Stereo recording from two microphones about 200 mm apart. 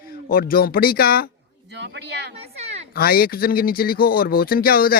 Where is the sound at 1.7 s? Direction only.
60° right (ahead or behind).